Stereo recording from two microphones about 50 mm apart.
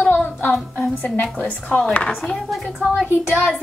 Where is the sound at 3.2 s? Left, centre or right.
Left.